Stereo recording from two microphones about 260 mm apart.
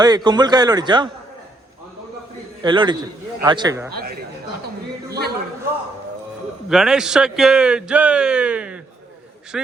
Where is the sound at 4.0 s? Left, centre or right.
Right.